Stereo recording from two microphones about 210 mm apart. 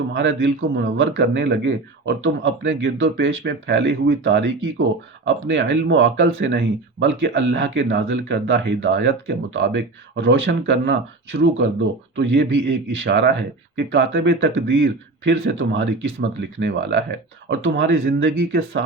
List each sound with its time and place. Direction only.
0.1 s speech: 60° right (ahead or behind)